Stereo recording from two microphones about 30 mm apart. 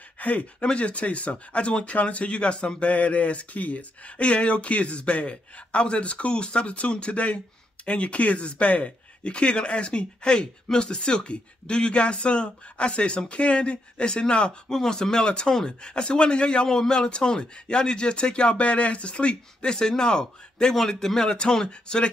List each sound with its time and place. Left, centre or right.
0.2 s speech: left
0.6 s a man's voice: left
1.9 s a man's voice: left
4.2 s a man's voice: left
14.7 s speech: centre; by 19.7 s left
19.7 s speech: left
21.6 s speech: left